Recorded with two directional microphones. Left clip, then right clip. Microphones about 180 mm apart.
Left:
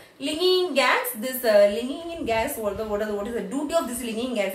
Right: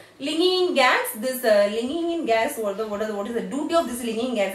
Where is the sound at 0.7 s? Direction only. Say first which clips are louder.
Right 2 dB; 20° right (ahead or behind).